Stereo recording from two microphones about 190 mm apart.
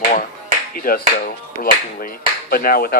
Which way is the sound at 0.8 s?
50° left (ahead or behind).